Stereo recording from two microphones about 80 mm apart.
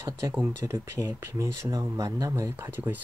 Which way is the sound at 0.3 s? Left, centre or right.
Right.